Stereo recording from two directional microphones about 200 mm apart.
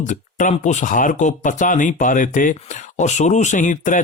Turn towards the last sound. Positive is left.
turn(degrees=40)  # may be behind; listen again after turning